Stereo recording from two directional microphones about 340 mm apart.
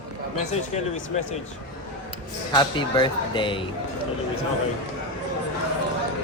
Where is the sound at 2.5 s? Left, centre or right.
Centre.